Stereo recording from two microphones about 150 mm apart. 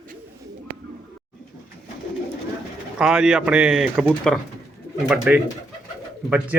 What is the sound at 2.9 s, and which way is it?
Speech, 5° right (ahead or behind).